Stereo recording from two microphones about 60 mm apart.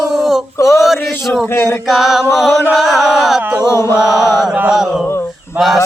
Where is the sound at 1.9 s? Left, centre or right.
Centre.